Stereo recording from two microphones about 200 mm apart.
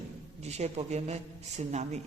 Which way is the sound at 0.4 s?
35° right (ahead or behind).